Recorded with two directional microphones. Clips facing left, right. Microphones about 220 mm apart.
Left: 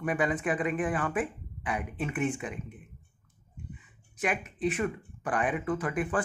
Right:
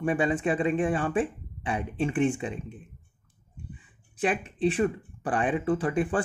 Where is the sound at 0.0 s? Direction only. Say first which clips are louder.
Right 4 dB; 30° right (ahead or behind).